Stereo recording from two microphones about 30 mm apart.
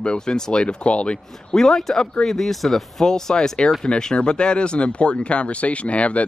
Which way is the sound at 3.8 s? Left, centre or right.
Left.